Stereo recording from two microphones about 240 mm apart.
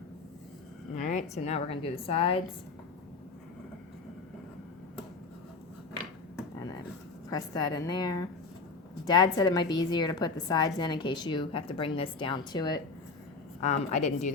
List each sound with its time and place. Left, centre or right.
0.9 s a woman's voice: left
7.3 s a woman's voice: centre
13.6 s a woman's voice: left